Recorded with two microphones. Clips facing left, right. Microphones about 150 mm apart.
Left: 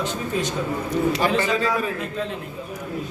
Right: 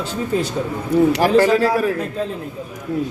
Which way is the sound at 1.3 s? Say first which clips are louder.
Right 8 dB; 35° right (ahead or behind).